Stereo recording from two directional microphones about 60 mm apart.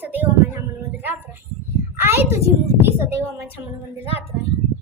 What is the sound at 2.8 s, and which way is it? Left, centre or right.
Speech, right.